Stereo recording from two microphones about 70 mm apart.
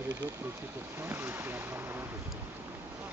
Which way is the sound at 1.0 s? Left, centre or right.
Right.